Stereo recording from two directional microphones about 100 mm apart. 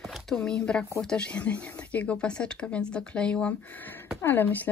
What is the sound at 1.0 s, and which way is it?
Speech, 10° left (ahead or behind).